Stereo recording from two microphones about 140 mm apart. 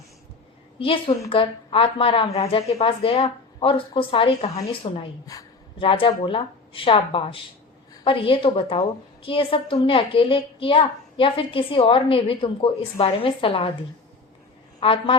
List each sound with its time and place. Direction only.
0.8 s a woman's voice: 40° left (ahead or behind)
5.2 s speech: 25° left (ahead or behind)
5.8 s a woman's voice: 40° left (ahead or behind)
14.8 s a woman's voice: 40° left (ahead or behind)